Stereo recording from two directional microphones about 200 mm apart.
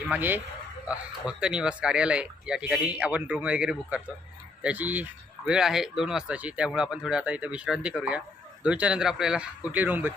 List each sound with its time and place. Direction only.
0.1 s speech: 10° right (ahead or behind)